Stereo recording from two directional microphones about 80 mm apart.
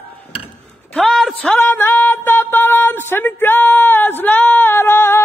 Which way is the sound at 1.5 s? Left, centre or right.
Left.